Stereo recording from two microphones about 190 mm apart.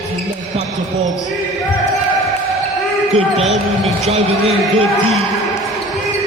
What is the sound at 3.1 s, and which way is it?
Speech, 35° right (ahead or behind).